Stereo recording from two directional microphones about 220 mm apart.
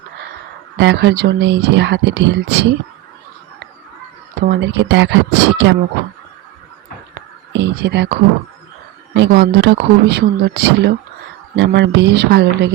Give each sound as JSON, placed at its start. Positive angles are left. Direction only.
{"t": 0.8, "sound": "speech", "side_deg": -50}
{"t": 4.4, "sound": "speech", "side_deg": -45}
{"t": 7.1, "sound": "a sound", "side_deg": -50}
{"t": 9.1, "sound": "speech", "side_deg": -50}